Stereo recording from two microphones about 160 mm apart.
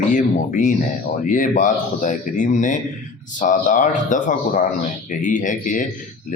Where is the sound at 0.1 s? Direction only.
55° left (ahead or behind).